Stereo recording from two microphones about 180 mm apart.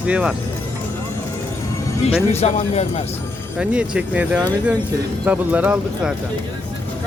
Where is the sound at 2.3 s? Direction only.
35° left (ahead or behind).